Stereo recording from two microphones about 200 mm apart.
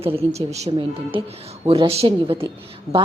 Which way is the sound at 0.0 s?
30° right (ahead or behind).